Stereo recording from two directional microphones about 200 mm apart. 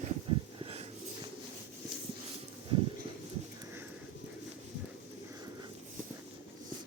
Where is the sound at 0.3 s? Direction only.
25° right (ahead or behind).